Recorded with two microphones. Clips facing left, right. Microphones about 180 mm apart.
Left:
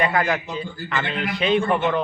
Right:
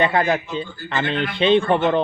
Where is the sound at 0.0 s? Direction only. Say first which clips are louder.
Right 3 dB; 25° right (ahead or behind).